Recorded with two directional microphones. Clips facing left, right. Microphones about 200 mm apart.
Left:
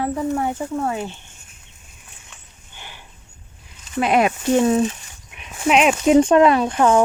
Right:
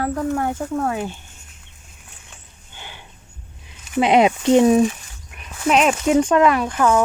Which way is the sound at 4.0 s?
20° right (ahead or behind).